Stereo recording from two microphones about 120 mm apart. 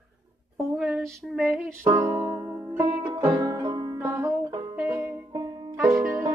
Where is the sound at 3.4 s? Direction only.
30° right (ahead or behind).